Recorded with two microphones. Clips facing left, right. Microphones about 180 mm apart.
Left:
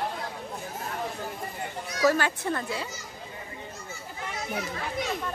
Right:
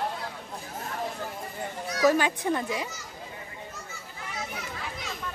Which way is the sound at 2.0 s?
15° right (ahead or behind).